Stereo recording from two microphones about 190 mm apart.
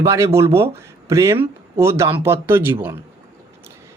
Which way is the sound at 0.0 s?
15° right (ahead or behind).